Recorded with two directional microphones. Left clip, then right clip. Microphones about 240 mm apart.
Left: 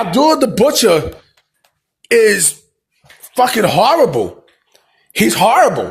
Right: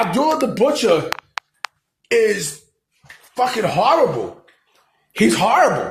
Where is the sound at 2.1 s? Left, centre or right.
Left.